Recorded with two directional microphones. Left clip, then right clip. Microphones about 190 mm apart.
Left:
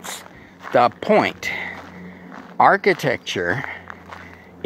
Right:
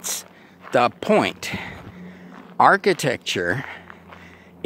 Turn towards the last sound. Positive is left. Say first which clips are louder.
# left 1 dB
turn(degrees=-35)  # may be behind; listen again after turning